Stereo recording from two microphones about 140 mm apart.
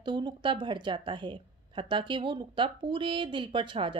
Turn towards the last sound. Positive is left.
turn(degrees=-35)  # may be behind; listen again after turning